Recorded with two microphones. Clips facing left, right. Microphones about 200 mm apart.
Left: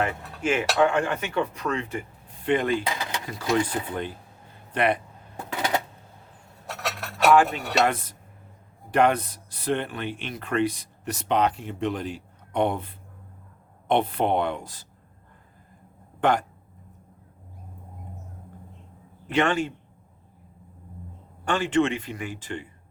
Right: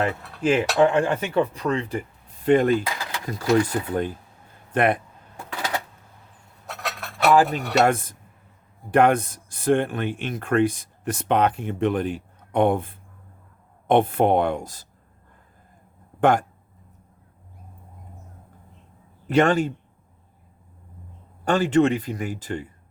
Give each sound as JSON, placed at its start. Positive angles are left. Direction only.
{"t": 0.0, "sound": "speech", "side_deg": -35}
{"t": 2.9, "sound": "a sound", "side_deg": 20}
{"t": 3.2, "sound": "speech", "side_deg": -40}
{"t": 5.4, "sound": "a sound", "side_deg": 20}
{"t": 7.3, "sound": "speech", "side_deg": -40}
{"t": 16.2, "sound": "speech", "side_deg": -50}
{"t": 19.3, "sound": "speech", "side_deg": -40}
{"t": 21.4, "sound": "speech", "side_deg": -40}